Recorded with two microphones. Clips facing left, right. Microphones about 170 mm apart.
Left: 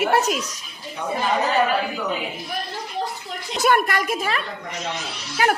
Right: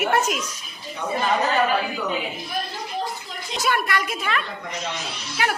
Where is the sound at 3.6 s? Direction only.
50° left (ahead or behind).